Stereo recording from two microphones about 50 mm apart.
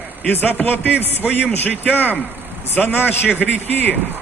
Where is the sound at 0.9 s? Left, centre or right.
Right.